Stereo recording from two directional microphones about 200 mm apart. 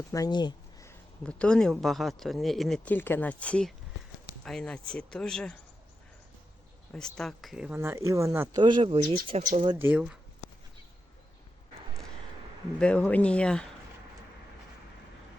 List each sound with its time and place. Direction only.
0.1 s a sound: 20° left (ahead or behind)
1.2 s speech: 5° left (ahead or behind)
6.9 s speech: 5° left (ahead or behind)
7.8 s speech: 15° right (ahead or behind)
9.7 s speech: 10° right (ahead or behind)
12.8 s speech: 5° left (ahead or behind)